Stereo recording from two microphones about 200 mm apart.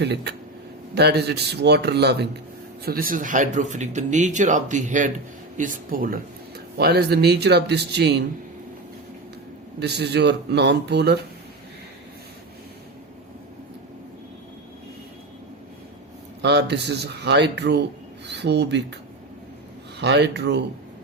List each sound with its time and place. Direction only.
0.0 s speech: 55° right (ahead or behind)
9.8 s speech: 55° right (ahead or behind)
16.4 s speech: 55° right (ahead or behind)
20.0 s speech: 60° right (ahead or behind)